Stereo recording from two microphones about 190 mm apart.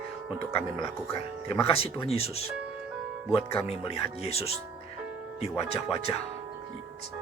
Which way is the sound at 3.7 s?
30° left (ahead or behind).